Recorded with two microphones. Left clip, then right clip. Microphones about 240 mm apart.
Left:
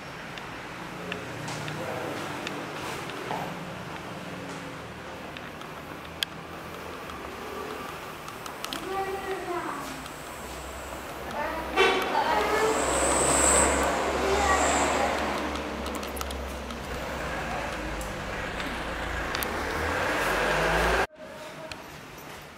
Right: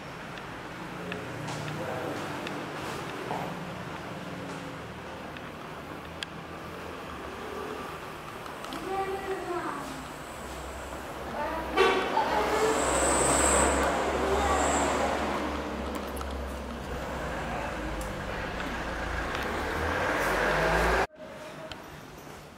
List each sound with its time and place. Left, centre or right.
11.8 s vehicle: centre
19.1 s vehicle: centre